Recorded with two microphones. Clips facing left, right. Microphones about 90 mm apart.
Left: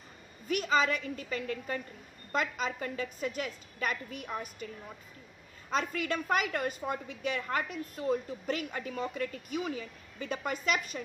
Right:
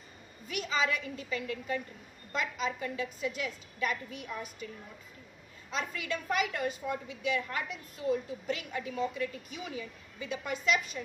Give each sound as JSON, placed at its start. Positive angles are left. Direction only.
{"t": 0.5, "sound": "a woman's voice", "side_deg": 45}
{"t": 5.7, "sound": "a woman's voice", "side_deg": 45}